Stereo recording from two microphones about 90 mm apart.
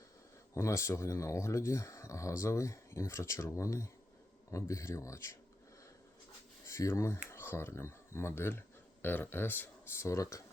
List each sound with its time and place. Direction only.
0.5 s speech: 30° left (ahead or behind)
6.7 s speech: 30° left (ahead or behind)